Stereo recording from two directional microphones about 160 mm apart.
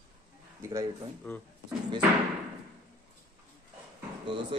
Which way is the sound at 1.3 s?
10° left (ahead or behind).